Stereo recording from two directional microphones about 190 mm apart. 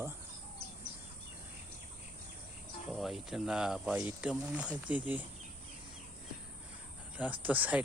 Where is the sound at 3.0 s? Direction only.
Centre (ahead or behind).